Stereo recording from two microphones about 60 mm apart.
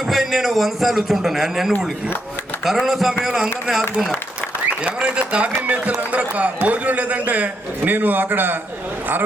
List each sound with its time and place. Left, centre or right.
0.1 s a man's voice: centre
4.8 s a man's voice: centre